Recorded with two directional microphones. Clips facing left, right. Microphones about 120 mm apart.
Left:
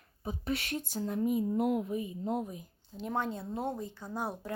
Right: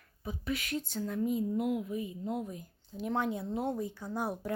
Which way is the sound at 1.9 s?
25° left (ahead or behind).